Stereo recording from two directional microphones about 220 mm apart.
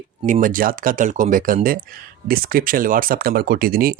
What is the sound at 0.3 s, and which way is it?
Speech, 35° right (ahead or behind).